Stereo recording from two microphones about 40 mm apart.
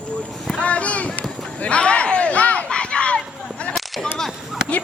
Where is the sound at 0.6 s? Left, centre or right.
Left.